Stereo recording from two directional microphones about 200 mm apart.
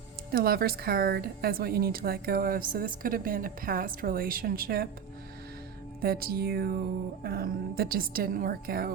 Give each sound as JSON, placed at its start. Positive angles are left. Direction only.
{"t": 0.3, "sound": "a woman's voice", "side_deg": -50}
{"t": 6.0, "sound": "a woman's voice", "side_deg": -50}